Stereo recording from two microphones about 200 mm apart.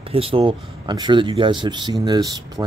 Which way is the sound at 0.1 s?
25° right (ahead or behind).